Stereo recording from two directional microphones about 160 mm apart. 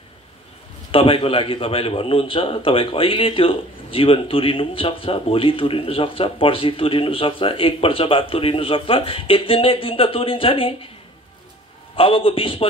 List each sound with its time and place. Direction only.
0.9 s a man's voice: 35° left (ahead or behind)
11.9 s a man's voice: 35° left (ahead or behind)